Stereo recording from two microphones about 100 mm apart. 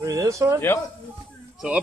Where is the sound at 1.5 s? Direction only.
10° right (ahead or behind).